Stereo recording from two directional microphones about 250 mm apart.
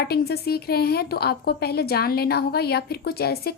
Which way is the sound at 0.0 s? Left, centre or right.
Left.